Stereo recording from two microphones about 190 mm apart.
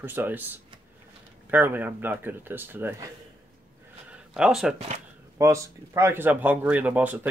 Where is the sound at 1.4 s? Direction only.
10° right (ahead or behind).